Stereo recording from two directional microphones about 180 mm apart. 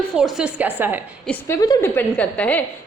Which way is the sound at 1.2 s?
15° left (ahead or behind).